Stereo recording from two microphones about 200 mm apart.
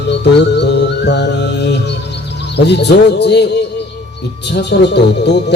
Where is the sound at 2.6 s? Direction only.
60° left (ahead or behind).